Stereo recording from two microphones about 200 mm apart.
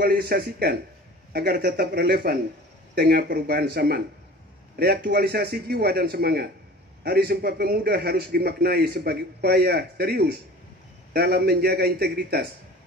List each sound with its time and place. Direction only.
0.0 s a man's voice: 50° right (ahead or behind)